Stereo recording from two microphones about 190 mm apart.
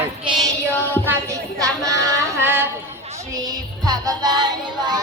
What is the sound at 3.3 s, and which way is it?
Music, 20° right (ahead or behind).